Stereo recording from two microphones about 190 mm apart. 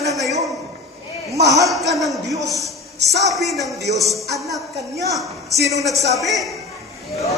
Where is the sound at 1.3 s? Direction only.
15° right (ahead or behind).